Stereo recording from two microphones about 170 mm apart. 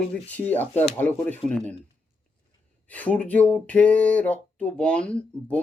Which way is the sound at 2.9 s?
10° left (ahead or behind).